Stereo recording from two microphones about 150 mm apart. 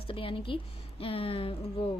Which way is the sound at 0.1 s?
35° left (ahead or behind).